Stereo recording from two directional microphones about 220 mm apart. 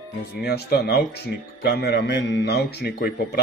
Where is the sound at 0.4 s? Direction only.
45° left (ahead or behind).